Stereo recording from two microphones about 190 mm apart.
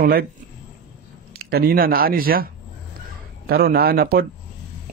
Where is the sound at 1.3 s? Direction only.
55° right (ahead or behind).